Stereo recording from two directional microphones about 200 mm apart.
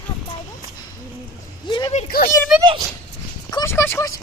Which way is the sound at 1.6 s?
25° left (ahead or behind).